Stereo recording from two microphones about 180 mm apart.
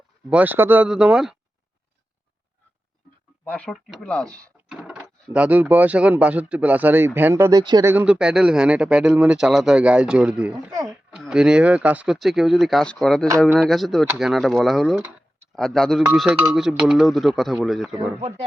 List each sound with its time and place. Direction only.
0.3 s speech: 10° right (ahead or behind)
3.4 s speech: 5° left (ahead or behind); by 7.9 s 20° right (ahead or behind)
7.9 s speech: 5° right (ahead or behind)